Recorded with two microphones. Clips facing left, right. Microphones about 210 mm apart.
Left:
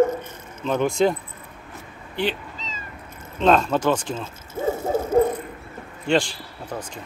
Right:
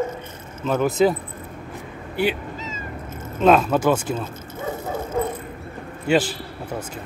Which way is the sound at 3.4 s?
5° right (ahead or behind).